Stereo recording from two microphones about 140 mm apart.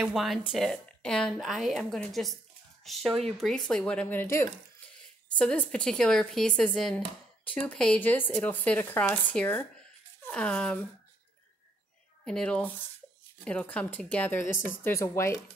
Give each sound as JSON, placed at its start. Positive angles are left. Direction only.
{"t": 0.0, "sound": "a woman's voice", "side_deg": 0}
{"t": 12.3, "sound": "speech", "side_deg": 5}